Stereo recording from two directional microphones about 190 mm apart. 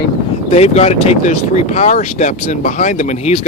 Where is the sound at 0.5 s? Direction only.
35° left (ahead or behind).